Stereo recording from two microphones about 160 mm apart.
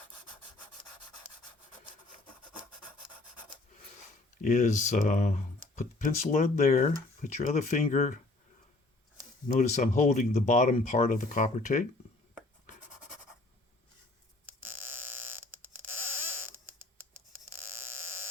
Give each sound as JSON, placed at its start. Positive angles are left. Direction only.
{"t": 4.4, "sound": "speech", "side_deg": 50}
{"t": 9.6, "sound": "speech", "side_deg": 50}
{"t": 14.4, "sound": "a sound", "side_deg": -15}